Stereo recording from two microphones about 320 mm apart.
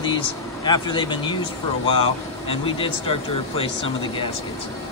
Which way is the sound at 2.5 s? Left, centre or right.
Centre.